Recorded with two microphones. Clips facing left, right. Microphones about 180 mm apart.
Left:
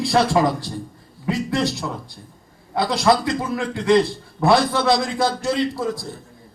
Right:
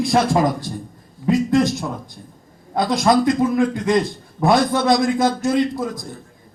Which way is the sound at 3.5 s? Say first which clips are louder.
Even; 15° right (ahead or behind).